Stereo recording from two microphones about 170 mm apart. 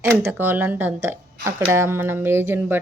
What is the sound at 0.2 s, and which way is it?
Speech, 10° right (ahead or behind).